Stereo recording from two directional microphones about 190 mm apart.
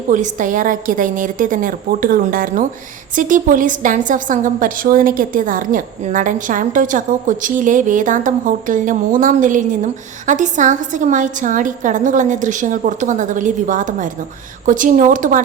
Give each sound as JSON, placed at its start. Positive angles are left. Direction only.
{"t": 0.1, "sound": "a woman's voice", "side_deg": -45}